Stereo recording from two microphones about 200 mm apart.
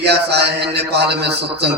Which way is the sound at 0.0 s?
55° right (ahead or behind).